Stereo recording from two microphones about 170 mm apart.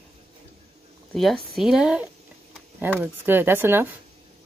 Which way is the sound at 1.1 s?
Centre (ahead or behind).